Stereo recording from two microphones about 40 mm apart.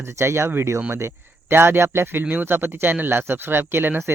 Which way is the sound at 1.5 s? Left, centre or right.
Right.